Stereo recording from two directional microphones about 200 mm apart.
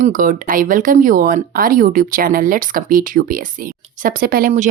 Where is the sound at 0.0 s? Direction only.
40° right (ahead or behind).